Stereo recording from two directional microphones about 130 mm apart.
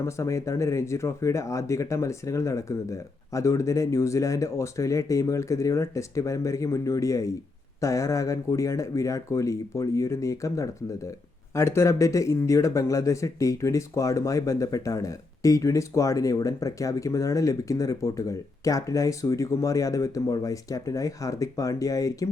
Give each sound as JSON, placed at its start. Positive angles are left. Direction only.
{"t": 0.0, "sound": "speech", "side_deg": 20}